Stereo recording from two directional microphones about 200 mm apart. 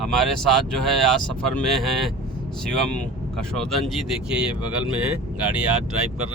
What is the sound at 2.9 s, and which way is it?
Speech, 5° left (ahead or behind).